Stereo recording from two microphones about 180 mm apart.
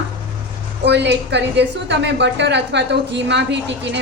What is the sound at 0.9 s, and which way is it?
A woman's voice, 75° right (ahead or behind).